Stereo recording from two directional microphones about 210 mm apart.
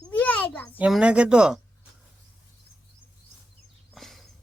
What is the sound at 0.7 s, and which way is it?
Speech, 5° right (ahead or behind).